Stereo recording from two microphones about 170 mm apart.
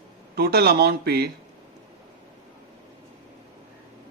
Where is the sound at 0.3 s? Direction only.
65° right (ahead or behind).